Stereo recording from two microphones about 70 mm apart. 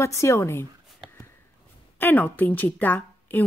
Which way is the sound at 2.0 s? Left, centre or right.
Left.